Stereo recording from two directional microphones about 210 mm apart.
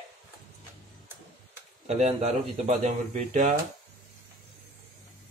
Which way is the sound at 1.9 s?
30° right (ahead or behind).